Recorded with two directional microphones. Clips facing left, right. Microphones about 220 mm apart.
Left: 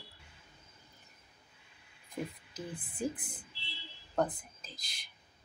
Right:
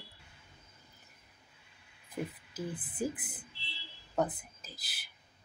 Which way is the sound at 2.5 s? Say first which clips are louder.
Right 3 dB; 5° right (ahead or behind).